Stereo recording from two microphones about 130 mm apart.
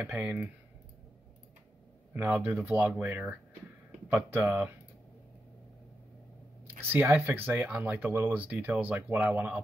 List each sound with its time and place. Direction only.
0.0 s speech: 10° right (ahead or behind)
2.1 s speech: 10° right (ahead or behind)
6.8 s speech: 15° right (ahead or behind)